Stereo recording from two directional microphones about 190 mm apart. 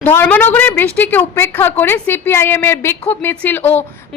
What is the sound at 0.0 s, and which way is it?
A woman's voice, 10° left (ahead or behind).